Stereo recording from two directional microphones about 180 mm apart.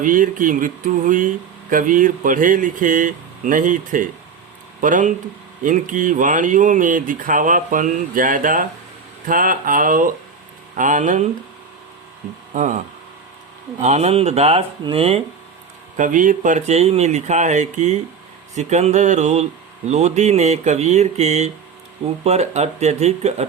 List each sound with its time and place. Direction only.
0.0 s speech: 50° right (ahead or behind)
12.5 s speech: 45° right (ahead or behind)
13.8 s speech: 35° right (ahead or behind)
16.0 s speech: 45° right (ahead or behind)